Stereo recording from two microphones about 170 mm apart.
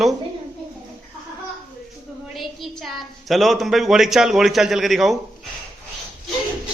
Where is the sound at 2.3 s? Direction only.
Centre (ahead or behind).